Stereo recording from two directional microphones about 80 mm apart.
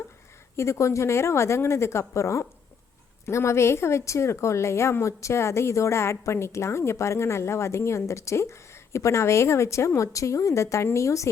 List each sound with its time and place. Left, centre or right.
0.5 s a woman's voice: left